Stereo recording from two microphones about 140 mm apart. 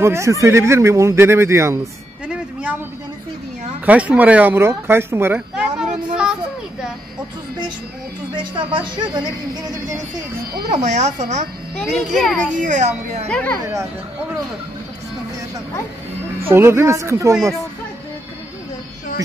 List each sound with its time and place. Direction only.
0.0 s speech: 20° right (ahead or behind)
2.2 s a sound: 10° right (ahead or behind)
3.8 s speech: 10° right (ahead or behind)
8.4 s speech: 35° right (ahead or behind)
10.5 s speech: 60° right (ahead or behind)
11.7 s a child's voice: 5° left (ahead or behind)
12.5 s speech: 65° right (ahead or behind)
13.3 s speech: 10° left (ahead or behind)
16.5 s speech: 15° right (ahead or behind)